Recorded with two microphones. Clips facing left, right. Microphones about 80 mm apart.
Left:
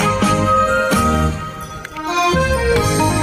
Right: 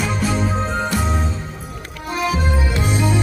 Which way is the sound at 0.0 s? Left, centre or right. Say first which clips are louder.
Left 6 dB; left.